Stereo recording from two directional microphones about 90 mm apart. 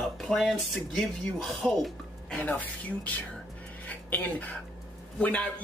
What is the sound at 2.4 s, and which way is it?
Speech, 15° left (ahead or behind).